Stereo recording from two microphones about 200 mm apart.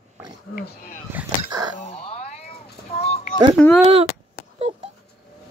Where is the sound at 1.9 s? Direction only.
30° left (ahead or behind).